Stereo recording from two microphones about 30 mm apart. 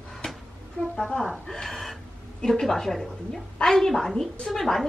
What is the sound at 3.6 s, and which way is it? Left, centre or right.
A woman's voice, centre.